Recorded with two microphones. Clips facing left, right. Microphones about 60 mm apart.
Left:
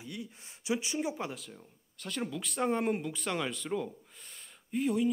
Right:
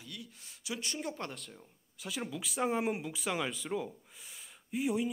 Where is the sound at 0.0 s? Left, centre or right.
Left.